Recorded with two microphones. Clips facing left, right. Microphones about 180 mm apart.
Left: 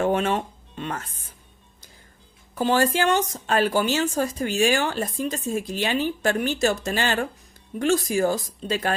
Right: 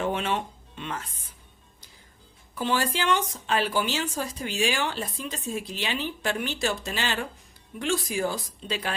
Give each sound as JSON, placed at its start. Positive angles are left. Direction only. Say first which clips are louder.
{"t": 0.0, "sound": "music", "louder": "left 5 dB", "side_deg": 45}
{"t": 2.6, "sound": "speech", "louder": "left 6 dB", "side_deg": 45}